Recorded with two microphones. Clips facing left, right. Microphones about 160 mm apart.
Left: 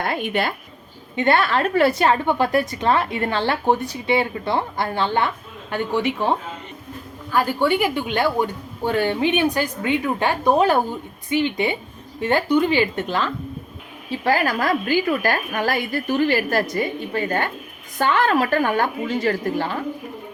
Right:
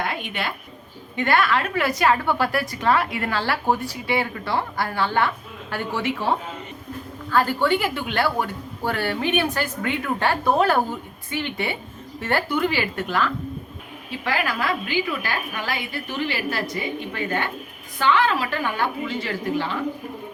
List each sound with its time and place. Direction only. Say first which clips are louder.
0.0 s a woman's voice: left 5 dB; 45° left (ahead or behind)
1.1 s a woman's voice: left 2 dB; 25° left (ahead or behind)
14.3 s a woman's voice: left 5 dB; 40° left (ahead or behind)